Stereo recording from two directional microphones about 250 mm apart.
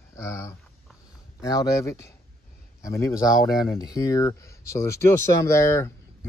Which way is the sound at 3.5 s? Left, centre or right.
Centre.